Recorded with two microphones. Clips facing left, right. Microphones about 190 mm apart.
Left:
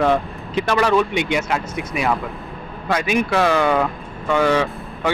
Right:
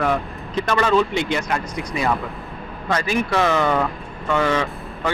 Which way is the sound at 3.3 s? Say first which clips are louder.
Left 1 dB; 5° left (ahead or behind).